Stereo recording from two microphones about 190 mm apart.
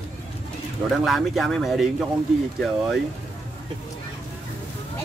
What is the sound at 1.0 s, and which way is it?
Speech, centre (ahead or behind).